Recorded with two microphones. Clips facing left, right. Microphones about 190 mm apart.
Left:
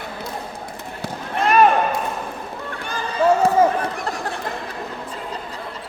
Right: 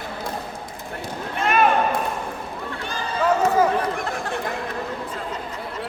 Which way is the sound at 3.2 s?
30° left (ahead or behind).